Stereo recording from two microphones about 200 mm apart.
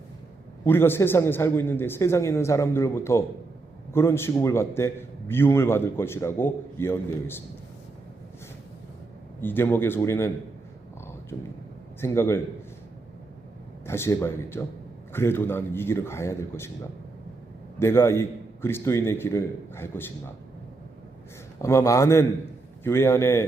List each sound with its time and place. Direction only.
0.6 s a man's voice: 10° left (ahead or behind)
9.4 s a man's voice: 10° left (ahead or behind)
13.8 s a man's voice: 15° left (ahead or behind)
17.7 s a man's voice: 15° left (ahead or behind)
21.6 s a man's voice: 15° left (ahead or behind)